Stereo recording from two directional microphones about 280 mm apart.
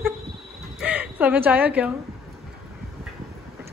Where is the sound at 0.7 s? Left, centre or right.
Centre.